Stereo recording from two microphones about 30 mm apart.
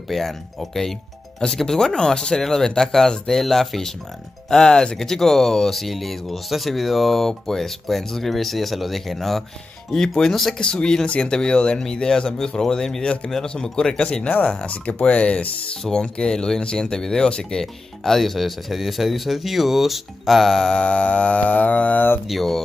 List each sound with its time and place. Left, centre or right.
0.1 s speech: centre
9.8 s speech: centre
10.6 s speech: left
11.8 s speech: left
13.0 s speech: left
13.6 s speech: left
14.0 s speech: left
15.8 s speech: centre
20.8 s a sound: left
21.5 s a sound: left